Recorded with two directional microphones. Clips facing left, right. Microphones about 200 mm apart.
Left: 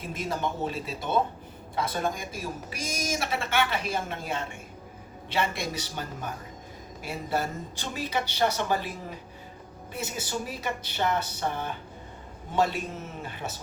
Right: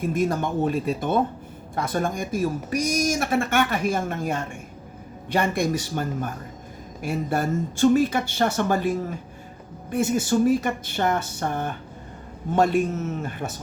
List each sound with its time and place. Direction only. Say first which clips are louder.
0.0 s speech: right 8 dB; 50° right (ahead or behind)